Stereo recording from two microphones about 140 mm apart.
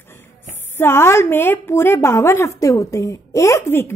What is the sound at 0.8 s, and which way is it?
A woman's voice, 15° left (ahead or behind).